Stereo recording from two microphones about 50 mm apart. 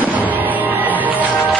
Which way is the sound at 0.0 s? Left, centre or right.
Right.